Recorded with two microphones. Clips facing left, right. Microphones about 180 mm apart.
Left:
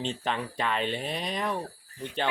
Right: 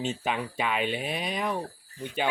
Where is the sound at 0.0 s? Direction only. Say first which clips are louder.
Right 1 dB; 5° right (ahead or behind).